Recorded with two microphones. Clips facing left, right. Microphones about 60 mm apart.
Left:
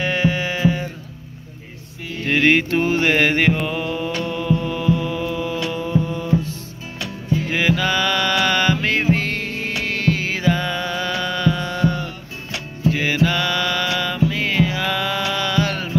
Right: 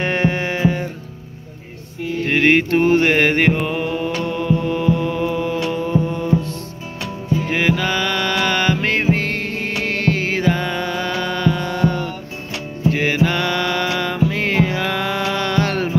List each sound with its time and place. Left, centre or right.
0.0 s music: right
2.2 s music: right
2.7 s mantra: right
3.1 s music: right
3.6 s mantra: right
7.5 s music: right
10.4 s music: right
14.3 s music: right
14.8 s mantra: right